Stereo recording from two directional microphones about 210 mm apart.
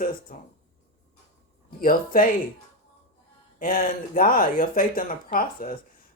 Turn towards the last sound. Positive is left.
turn(degrees=40)  # may be behind; listen again after turning